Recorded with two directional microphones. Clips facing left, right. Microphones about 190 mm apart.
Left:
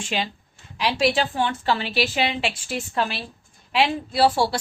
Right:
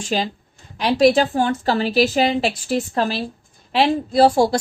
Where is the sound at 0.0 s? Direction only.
40° right (ahead or behind).